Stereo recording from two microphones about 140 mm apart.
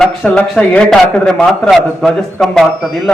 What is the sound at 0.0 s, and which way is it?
A man's voice, 5° left (ahead or behind).